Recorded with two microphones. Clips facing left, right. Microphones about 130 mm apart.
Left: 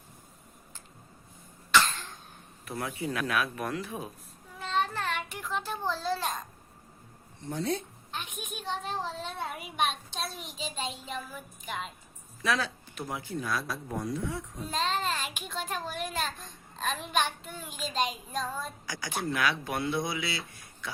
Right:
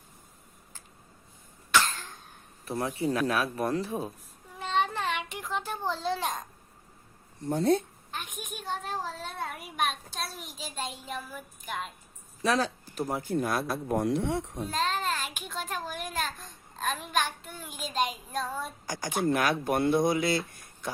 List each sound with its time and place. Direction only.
2.6 s speech: 35° right (ahead or behind)
4.7 s child singing: 20° right (ahead or behind)
7.4 s speech: 50° right (ahead or behind)
8.1 s a child's voice: 10° right (ahead or behind)
9.4 s a child's voice: 10° left (ahead or behind)
9.7 s a woman's voice: 5° right (ahead or behind)
12.4 s speech: 35° right (ahead or behind); by 14.7 s 75° right (ahead or behind)
14.7 s child singing: 5° right (ahead or behind)
15.4 s a child's voice: 10° right (ahead or behind)
18.9 s speech: 45° right (ahead or behind)